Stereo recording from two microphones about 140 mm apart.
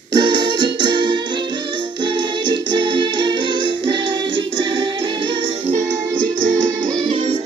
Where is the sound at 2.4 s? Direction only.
35° right (ahead or behind).